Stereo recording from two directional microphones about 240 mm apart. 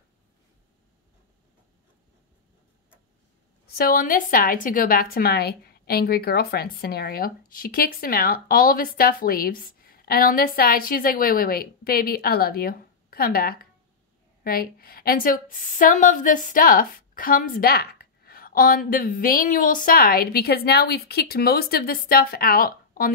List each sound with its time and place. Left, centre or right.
3.7 s a woman's voice: left